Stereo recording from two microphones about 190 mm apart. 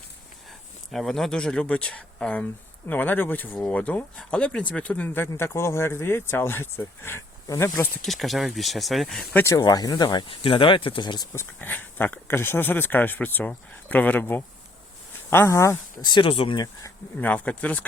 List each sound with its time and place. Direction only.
0.9 s speech: centre (ahead or behind)
8.0 s speech: centre (ahead or behind)
9.4 s speech: 20° left (ahead or behind)
17.2 s speech: 10° left (ahead or behind)